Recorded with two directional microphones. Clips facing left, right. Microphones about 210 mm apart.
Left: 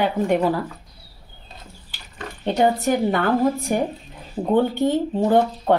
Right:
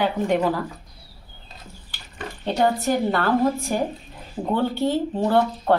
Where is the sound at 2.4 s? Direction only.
15° left (ahead or behind).